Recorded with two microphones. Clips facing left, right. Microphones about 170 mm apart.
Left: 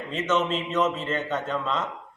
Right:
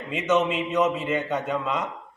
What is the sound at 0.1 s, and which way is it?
Speech, 10° right (ahead or behind).